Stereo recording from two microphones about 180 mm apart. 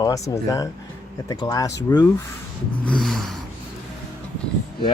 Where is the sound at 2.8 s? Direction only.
5° left (ahead or behind).